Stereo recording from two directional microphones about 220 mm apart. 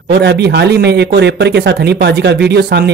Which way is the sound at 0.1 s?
50° right (ahead or behind).